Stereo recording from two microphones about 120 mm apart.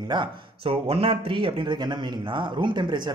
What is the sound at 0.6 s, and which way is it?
Speech, 50° right (ahead or behind).